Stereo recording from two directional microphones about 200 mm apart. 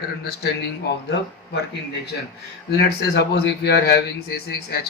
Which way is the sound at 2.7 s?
55° left (ahead or behind).